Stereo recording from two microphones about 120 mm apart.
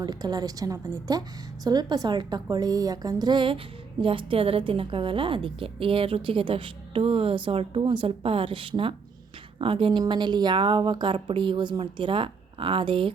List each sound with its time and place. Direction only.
0.0 s a woman's voice: 35° right (ahead or behind)